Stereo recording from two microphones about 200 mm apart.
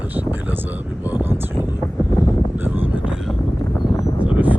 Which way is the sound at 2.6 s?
10° right (ahead or behind).